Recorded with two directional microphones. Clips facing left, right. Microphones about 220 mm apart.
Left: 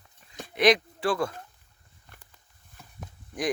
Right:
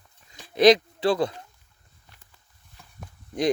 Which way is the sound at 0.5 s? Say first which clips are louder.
Right 5 dB; 40° right (ahead or behind).